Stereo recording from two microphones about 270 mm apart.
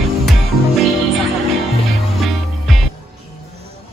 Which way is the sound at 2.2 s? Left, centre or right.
Centre.